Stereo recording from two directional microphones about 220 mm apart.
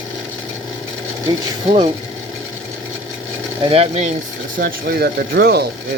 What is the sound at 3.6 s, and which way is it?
Speech, 30° right (ahead or behind).